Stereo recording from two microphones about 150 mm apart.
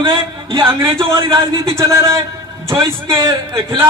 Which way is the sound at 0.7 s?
20° right (ahead or behind).